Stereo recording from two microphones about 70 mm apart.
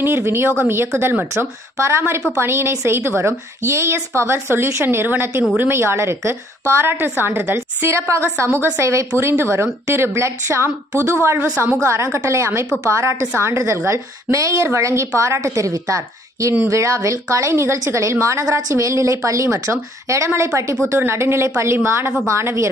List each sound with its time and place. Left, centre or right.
0.0 s a woman's voice: right
9.1 s a woman's voice: right